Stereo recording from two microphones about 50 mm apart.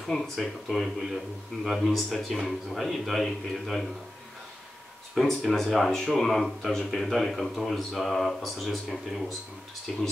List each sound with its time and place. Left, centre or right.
0.0 s a man's voice: centre
5.1 s a man's voice: centre